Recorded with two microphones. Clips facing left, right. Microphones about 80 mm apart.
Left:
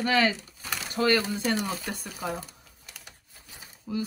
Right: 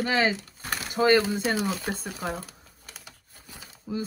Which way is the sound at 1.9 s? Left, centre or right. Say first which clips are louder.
Right 2 dB; right.